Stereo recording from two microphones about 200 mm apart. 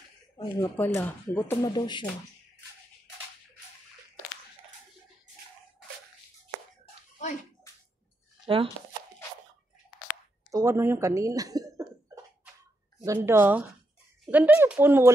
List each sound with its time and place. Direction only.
0.4 s speech: 10° left (ahead or behind)
7.7 s a sound: 15° left (ahead or behind)
8.5 s speech: 25° right (ahead or behind)
10.5 s speech: 15° right (ahead or behind)
13.0 s speech: 15° right (ahead or behind)